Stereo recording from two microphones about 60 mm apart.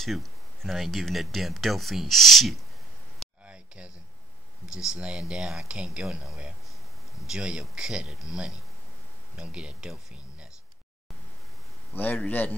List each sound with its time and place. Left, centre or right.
0.0 s speech: centre
3.4 s a sound: centre
4.7 s speech: centre
9.4 s speech: centre
11.9 s a man's voice: left